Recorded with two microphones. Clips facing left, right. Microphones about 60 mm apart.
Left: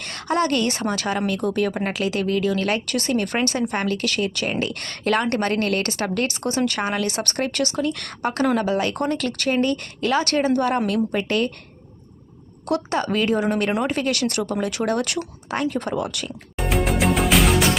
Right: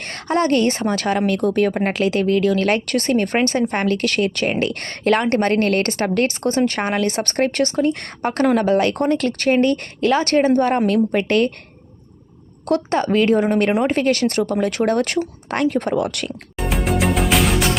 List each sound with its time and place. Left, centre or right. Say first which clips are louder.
0.0 s a woman's voice: right 3 dB; right
12.6 s a woman's voice: right 4 dB; right
16.6 s music: right 1 dB; centre